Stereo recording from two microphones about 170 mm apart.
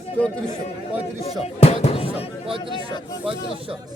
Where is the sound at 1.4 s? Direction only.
40° left (ahead or behind).